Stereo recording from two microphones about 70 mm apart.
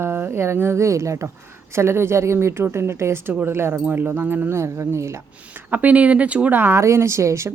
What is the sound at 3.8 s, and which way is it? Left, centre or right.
Speech, right.